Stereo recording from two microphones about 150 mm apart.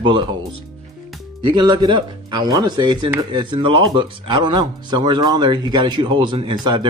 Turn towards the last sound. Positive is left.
turn(degrees=-30)  # may be behind; listen again after turning